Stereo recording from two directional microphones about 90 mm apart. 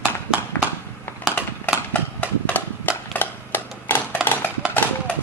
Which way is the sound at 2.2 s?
20° left (ahead or behind).